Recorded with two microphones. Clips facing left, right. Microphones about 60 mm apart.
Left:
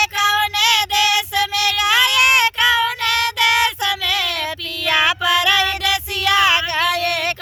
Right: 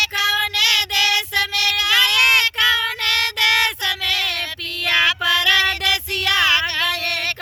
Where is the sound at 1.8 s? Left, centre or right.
Centre.